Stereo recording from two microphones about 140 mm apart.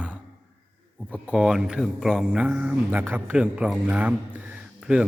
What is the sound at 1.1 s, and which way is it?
A man's voice, 5° right (ahead or behind).